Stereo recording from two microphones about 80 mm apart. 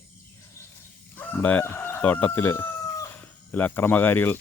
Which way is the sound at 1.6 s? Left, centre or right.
Left.